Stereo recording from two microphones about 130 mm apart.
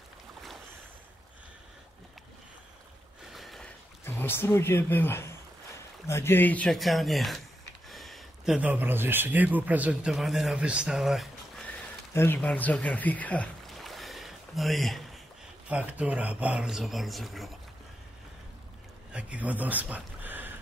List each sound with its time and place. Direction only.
3.3 s a sound: centre (ahead or behind)
4.0 s speech: 15° left (ahead or behind)
6.7 s speech: centre (ahead or behind)
7.9 s a sound: centre (ahead or behind)
8.5 s speech: 15° right (ahead or behind)
10.1 s speech: centre (ahead or behind)
12.1 s speech: 15° left (ahead or behind)
13.7 s boat: centre (ahead or behind)
15.7 s speech: 10° right (ahead or behind)
19.1 s speech: 10° right (ahead or behind)